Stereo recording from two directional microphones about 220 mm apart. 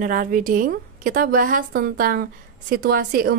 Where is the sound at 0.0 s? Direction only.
40° right (ahead or behind).